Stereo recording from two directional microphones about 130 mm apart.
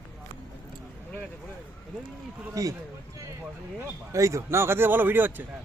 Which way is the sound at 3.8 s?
25° right (ahead or behind).